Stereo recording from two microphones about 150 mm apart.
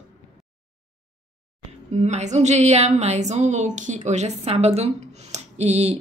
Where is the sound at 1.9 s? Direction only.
50° right (ahead or behind).